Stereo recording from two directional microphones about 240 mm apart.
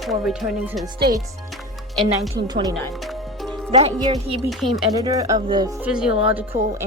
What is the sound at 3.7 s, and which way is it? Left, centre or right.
Speech, right.